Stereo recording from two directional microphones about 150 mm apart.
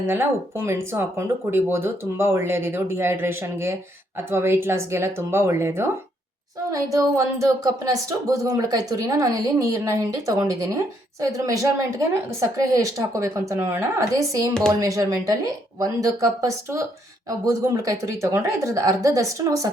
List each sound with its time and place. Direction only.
0.1 s speech: 15° right (ahead or behind)